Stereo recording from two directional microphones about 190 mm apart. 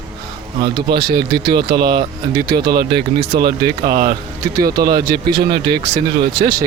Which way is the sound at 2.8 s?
55° right (ahead or behind).